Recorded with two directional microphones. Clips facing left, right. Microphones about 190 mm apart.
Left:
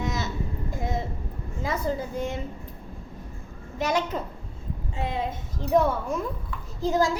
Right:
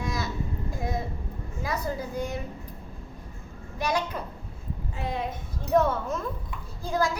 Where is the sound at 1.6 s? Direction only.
25° left (ahead or behind).